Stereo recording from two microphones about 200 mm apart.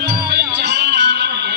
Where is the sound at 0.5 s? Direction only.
60° right (ahead or behind).